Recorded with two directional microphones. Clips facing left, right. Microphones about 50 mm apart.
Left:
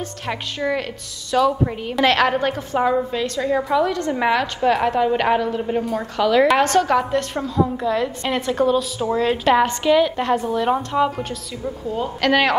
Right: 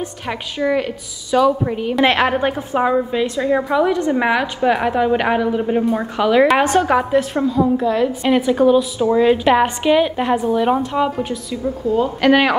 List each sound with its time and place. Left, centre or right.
0.6 s a woman's voice: centre
2.0 s a woman's voice: right; by 11.3 s centre
11.5 s a woman's voice: right
12.2 s a woman's voice: centre